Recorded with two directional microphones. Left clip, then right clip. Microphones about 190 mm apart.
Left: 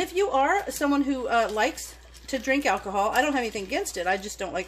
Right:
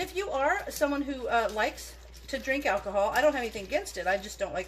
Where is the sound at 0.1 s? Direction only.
50° left (ahead or behind).